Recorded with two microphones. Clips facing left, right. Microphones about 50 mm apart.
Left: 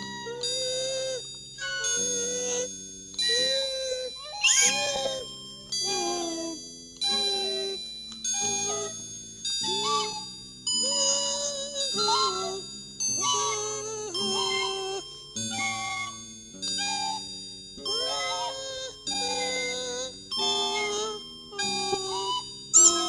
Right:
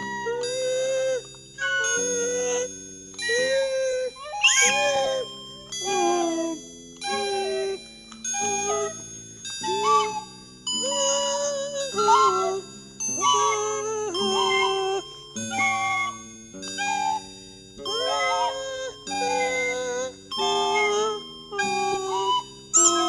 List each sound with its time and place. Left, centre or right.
0.0 s music: right